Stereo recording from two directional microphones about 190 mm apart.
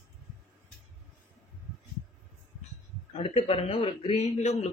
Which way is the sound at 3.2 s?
30° left (ahead or behind).